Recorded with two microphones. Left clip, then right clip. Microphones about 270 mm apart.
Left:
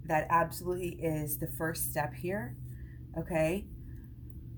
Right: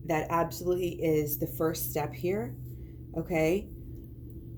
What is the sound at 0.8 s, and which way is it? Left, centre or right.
Speech, left.